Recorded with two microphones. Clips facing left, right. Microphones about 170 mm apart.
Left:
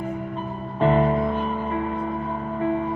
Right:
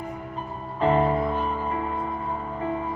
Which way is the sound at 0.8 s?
35° right (ahead or behind).